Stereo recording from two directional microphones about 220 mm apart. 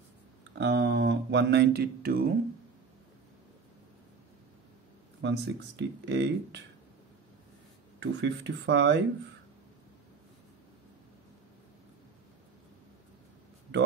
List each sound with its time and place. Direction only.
0.6 s speech: 50° right (ahead or behind)
5.2 s speech: 55° right (ahead or behind)
8.0 s speech: 50° right (ahead or behind)
13.7 s a sound: 50° right (ahead or behind)